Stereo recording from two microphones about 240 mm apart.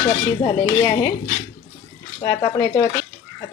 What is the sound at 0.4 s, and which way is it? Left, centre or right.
Speech, centre.